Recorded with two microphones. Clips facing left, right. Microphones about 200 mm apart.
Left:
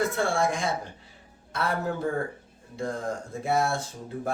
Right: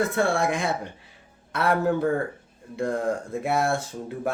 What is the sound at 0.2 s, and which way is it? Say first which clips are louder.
A man's voice: right 3 dB; 60° right (ahead or behind).